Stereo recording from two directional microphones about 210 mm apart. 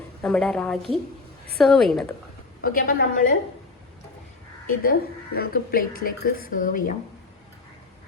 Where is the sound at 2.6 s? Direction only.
45° left (ahead or behind).